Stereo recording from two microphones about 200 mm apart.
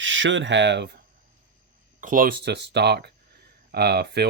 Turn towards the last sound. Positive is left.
turn(degrees=-55)  # may be behind; listen again after turning